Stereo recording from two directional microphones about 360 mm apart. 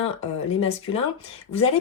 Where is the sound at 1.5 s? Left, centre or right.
Centre.